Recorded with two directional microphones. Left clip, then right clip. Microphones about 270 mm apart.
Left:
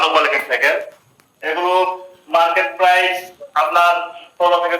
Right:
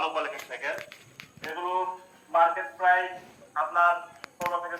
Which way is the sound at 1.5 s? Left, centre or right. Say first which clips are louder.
Left 14 dB; left.